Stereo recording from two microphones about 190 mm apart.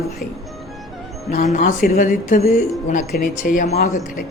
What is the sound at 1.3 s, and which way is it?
Speech, 40° left (ahead or behind).